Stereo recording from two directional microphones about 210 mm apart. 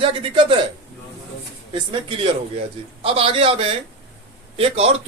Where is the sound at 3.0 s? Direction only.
25° right (ahead or behind).